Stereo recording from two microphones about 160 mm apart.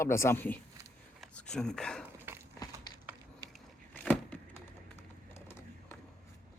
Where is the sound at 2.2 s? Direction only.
15° right (ahead or behind).